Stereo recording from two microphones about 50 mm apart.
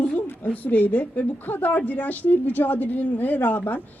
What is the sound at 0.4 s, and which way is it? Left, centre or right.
A woman's voice, left.